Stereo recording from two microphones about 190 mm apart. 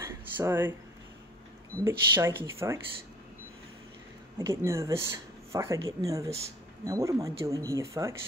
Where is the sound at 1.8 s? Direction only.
15° right (ahead or behind).